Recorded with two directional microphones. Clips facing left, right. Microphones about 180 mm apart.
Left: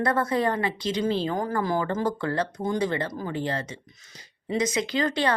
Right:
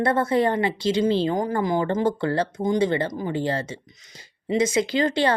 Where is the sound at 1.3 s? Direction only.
20° right (ahead or behind).